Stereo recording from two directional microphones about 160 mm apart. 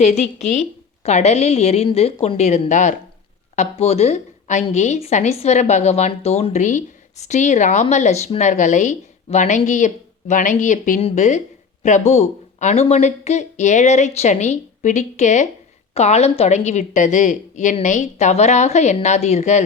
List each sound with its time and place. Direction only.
0.0 s a woman's voice: 45° left (ahead or behind)